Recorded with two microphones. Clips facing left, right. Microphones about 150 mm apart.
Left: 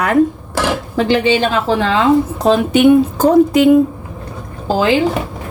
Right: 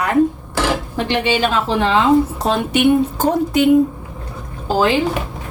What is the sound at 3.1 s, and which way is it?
Speech, 90° left.